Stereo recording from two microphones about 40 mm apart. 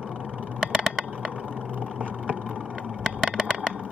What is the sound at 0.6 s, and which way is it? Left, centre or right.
Vehicle, centre.